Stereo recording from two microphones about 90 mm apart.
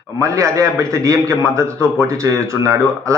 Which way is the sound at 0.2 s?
35° right (ahead or behind).